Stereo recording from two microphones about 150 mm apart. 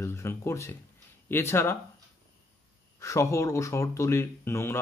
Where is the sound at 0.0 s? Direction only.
15° left (ahead or behind).